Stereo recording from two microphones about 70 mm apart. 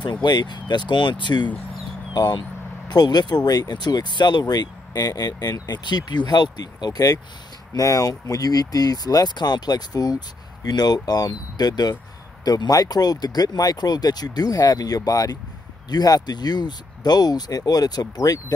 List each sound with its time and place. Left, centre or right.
0.0 s speech: left
2.1 s speech: left